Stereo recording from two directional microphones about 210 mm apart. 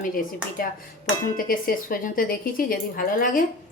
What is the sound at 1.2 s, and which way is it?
A woman's voice, 45° left (ahead or behind).